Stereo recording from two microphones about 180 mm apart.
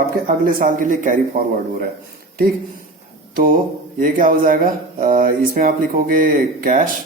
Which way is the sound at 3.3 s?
50° right (ahead or behind).